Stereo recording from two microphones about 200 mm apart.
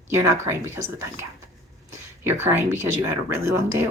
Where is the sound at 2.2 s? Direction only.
10° right (ahead or behind).